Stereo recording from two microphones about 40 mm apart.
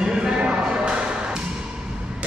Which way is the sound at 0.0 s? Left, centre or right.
Centre.